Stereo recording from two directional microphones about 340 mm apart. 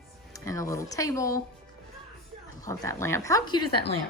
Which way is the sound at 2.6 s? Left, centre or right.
Centre.